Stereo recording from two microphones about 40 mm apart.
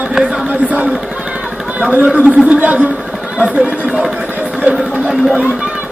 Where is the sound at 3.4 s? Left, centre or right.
Right.